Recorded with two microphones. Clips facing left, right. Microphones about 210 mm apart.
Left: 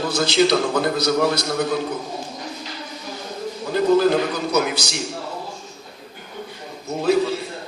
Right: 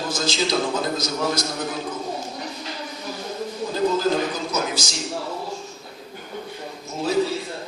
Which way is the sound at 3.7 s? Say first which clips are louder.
Left 5 dB; 65° left (ahead or behind).